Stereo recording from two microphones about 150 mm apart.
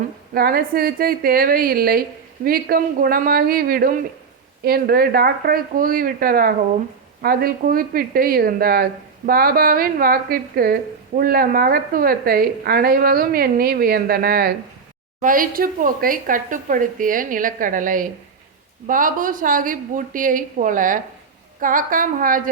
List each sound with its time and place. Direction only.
0.3 s speech: 80° right
15.2 s speech: 65° right (ahead or behind)